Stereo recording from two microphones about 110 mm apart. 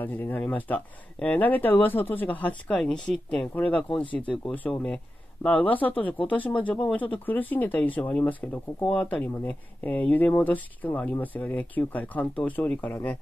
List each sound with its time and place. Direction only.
0.0 s speech: 15° left (ahead or behind)